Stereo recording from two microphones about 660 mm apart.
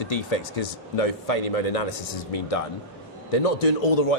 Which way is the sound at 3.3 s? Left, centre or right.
Left.